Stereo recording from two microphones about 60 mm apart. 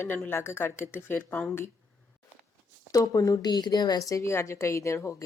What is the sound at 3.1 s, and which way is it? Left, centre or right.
Speech, left.